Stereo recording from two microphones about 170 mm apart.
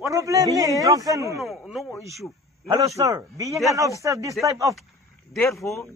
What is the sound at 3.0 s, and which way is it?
Speech, 20° right (ahead or behind).